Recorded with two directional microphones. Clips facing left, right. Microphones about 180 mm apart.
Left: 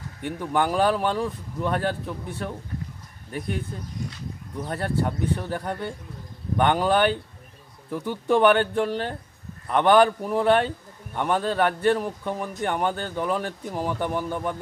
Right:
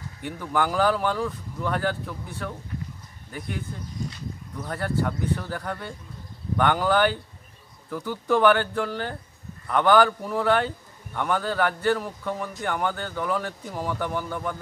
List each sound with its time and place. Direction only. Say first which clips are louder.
0.4 s a man's voice: left 1 dB; 25° left (ahead or behind)
4.6 s a man's voice: left 1 dB; 25° left (ahead or behind)